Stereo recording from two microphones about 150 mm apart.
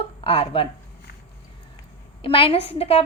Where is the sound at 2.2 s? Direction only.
35° left (ahead or behind).